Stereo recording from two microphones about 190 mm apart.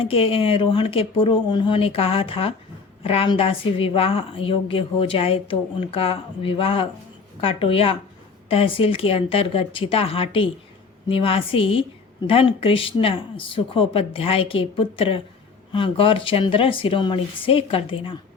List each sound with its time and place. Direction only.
0.0 s a woman's voice: 30° left (ahead or behind)